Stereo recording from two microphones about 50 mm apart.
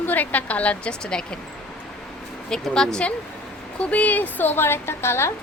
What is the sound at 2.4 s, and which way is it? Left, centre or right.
Speech, centre.